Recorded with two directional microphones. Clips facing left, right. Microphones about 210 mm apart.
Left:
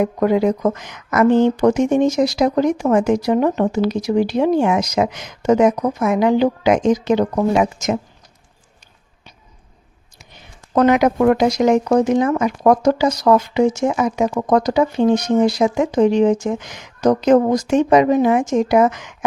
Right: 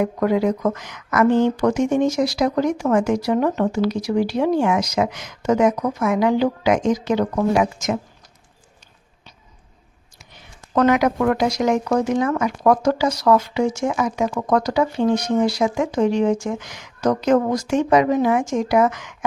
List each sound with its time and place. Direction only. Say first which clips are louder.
0.0 s speech: left 3 dB; 20° left (ahead or behind)
10.8 s speech: left 3 dB; 25° left (ahead or behind)